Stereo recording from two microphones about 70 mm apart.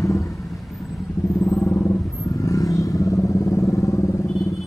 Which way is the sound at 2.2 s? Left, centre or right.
Left.